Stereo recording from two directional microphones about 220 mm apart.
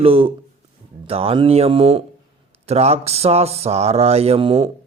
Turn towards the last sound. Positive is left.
turn(degrees=-25)  # may be behind; listen again after turning